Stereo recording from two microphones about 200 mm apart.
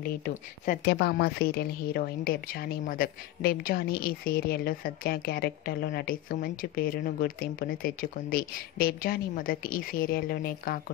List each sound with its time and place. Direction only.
0.2 s a woman's voice: 45° left (ahead or behind)